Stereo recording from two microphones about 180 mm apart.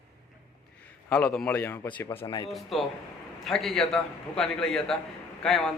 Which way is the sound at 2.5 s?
Centre (ahead or behind).